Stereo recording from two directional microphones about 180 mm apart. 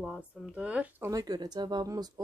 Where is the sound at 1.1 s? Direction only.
20° right (ahead or behind).